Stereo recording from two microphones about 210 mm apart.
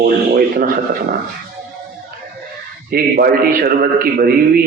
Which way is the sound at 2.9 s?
45° right (ahead or behind).